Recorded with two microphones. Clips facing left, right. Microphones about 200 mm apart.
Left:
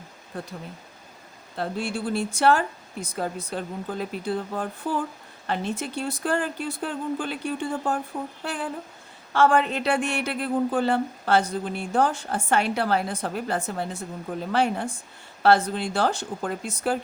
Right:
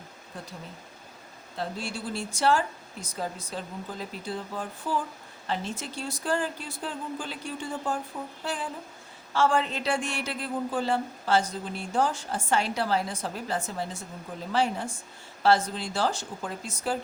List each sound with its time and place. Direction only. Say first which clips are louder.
0.3 s speech: left 7 dB; 60° left (ahead or behind)
1.5 s speech: left 5 dB; 60° left (ahead or behind)